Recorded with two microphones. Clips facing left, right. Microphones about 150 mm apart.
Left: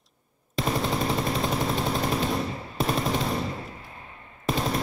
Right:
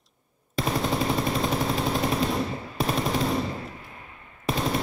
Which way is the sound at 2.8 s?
Centre (ahead or behind).